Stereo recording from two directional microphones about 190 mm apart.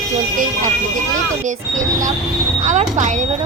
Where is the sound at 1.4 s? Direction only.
40° right (ahead or behind).